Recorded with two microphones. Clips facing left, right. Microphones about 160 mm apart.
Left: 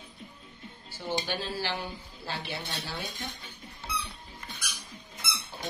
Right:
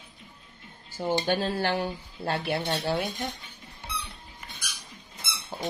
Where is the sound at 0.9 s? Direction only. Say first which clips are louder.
Right 7 dB; 45° right (ahead or behind).